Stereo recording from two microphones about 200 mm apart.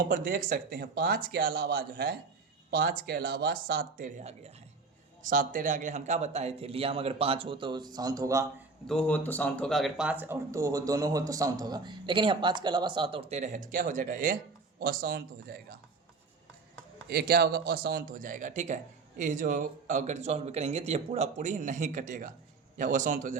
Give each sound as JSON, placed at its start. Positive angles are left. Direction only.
{"t": 0.0, "sound": "speech", "side_deg": -45}
{"t": 8.9, "sound": "speech", "side_deg": 5}
{"t": 17.1, "sound": "speech", "side_deg": -50}